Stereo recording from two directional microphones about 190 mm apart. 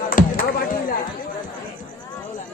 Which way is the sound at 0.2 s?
45° left (ahead or behind).